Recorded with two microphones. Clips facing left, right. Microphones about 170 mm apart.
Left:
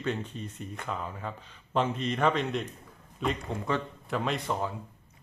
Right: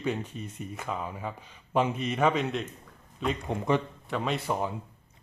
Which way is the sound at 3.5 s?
20° right (ahead or behind).